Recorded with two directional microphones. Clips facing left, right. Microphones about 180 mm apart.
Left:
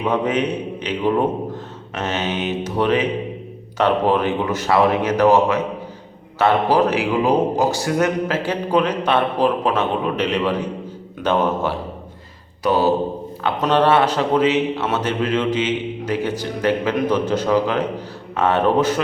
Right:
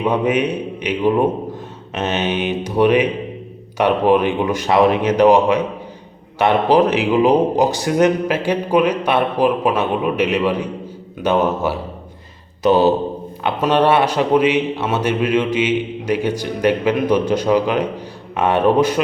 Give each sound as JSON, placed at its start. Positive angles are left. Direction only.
{"t": 0.0, "sound": "a man's voice", "side_deg": -10}
{"t": 12.6, "sound": "a man's voice", "side_deg": -20}